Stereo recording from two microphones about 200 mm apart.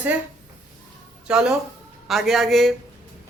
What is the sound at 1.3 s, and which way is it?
Speech, 5° right (ahead or behind).